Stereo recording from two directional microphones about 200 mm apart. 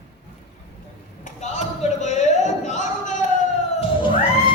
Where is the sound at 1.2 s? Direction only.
35° left (ahead or behind).